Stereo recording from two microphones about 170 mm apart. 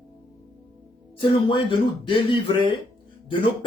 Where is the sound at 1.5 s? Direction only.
30° left (ahead or behind).